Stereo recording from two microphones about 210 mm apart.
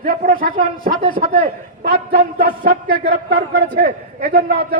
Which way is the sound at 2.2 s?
45° right (ahead or behind).